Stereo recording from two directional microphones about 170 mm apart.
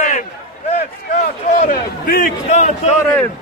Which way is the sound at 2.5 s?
45° left (ahead or behind).